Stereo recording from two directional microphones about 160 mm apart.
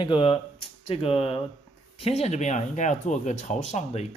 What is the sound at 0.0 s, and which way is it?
Speech, 35° left (ahead or behind).